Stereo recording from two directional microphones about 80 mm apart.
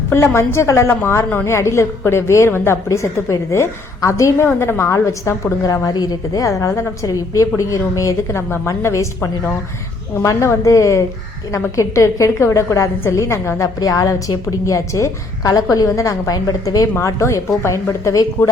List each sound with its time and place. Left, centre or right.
0.1 s a woman's voice: left
13.7 s a woman's voice: left